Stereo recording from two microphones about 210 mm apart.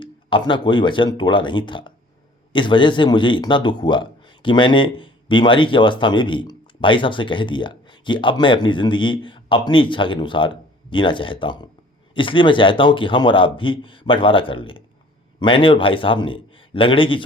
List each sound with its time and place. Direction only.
0.0 s speech: 25° left (ahead or behind)